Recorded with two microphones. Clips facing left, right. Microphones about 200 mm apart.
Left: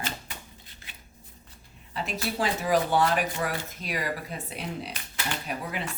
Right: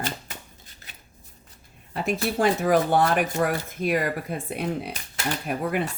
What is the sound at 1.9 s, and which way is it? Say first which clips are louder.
Speech: right 6 dB; 50° right (ahead or behind).